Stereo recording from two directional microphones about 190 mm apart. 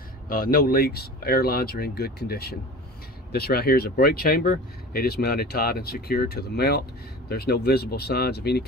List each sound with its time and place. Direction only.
0.3 s speech: 50° left (ahead or behind)